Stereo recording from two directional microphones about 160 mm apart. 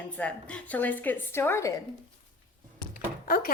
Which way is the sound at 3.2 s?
65° left (ahead or behind).